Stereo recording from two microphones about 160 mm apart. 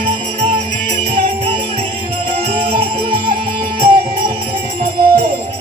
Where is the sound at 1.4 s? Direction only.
35° right (ahead or behind).